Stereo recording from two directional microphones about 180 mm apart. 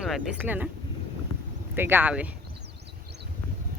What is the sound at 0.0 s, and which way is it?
Speech, 5° right (ahead or behind).